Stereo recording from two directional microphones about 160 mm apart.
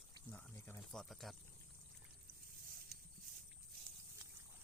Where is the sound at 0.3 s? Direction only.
10° left (ahead or behind).